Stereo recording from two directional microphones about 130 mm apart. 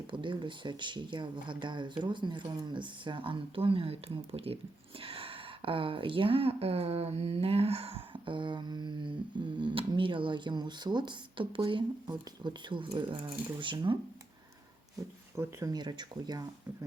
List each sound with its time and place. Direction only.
0.1 s speech: 40° right (ahead or behind)
15.4 s speech: 30° right (ahead or behind)